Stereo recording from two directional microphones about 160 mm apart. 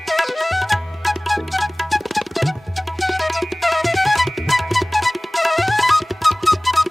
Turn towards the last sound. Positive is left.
turn(degrees=0)  # may be behind; listen again after turning